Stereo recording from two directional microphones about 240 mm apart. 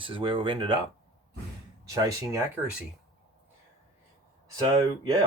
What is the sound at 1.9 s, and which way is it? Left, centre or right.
Speech, centre.